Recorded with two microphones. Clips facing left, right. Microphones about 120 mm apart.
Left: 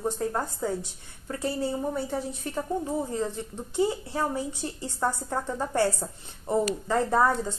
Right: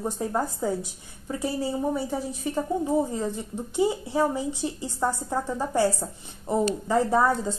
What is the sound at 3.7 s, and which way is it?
A woman's voice, 15° right (ahead or behind).